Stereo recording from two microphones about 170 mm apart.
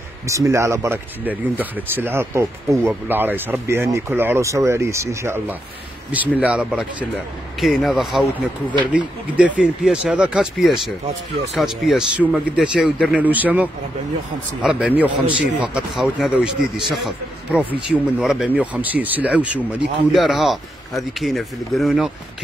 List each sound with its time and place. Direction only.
0.3 s a man's voice: 15° right (ahead or behind); by 22.1 s centre (ahead or behind)